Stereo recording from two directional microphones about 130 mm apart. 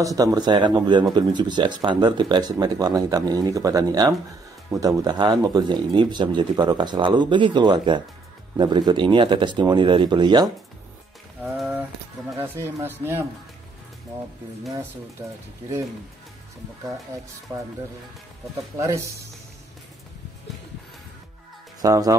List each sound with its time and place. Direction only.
0.0 s speech: 25° right (ahead or behind)
11.4 s speech: centre (ahead or behind)
12.4 s speech: 20° right (ahead or behind)
18.8 s speech: 20° right (ahead or behind)
21.8 s speech: 25° right (ahead or behind)